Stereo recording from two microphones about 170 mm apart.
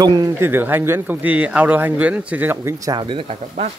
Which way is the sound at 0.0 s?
20° right (ahead or behind).